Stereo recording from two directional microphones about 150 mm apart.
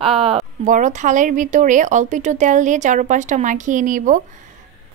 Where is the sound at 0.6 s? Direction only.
55° right (ahead or behind).